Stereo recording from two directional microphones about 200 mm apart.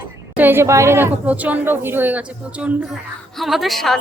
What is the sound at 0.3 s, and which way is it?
A woman's voice, 10° right (ahead or behind).